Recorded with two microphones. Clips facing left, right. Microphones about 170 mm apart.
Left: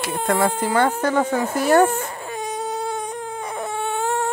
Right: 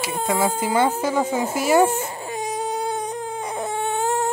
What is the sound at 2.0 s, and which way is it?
Baby cry, 25° right (ahead or behind).